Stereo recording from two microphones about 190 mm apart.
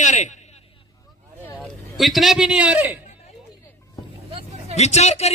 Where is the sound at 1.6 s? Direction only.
Centre (ahead or behind).